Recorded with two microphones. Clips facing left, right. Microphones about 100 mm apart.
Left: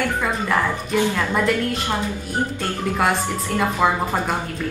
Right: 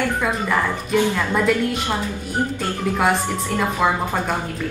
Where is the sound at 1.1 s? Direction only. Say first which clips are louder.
Right 1 dB; centre (ahead or behind).